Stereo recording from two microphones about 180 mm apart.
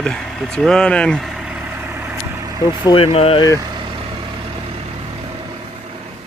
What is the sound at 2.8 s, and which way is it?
Speech, 30° left (ahead or behind).